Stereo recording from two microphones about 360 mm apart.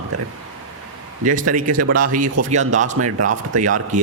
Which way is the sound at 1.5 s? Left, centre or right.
Right.